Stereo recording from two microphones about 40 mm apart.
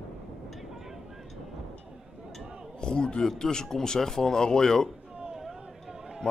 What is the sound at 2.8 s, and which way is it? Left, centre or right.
A man's voice, left.